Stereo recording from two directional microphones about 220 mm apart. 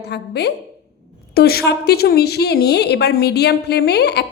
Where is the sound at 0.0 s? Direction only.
50° left (ahead or behind).